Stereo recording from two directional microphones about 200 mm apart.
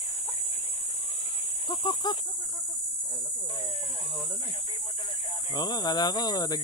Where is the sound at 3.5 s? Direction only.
25° left (ahead or behind).